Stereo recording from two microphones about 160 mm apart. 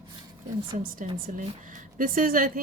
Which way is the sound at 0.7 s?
45° right (ahead or behind).